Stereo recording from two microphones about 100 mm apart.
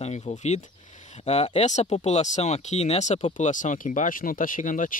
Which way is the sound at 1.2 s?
90° left.